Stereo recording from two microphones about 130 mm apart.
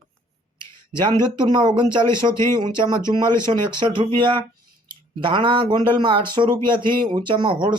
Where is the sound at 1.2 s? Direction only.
35° right (ahead or behind).